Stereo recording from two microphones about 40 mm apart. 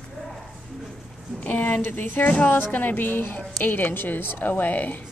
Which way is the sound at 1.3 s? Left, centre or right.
Left.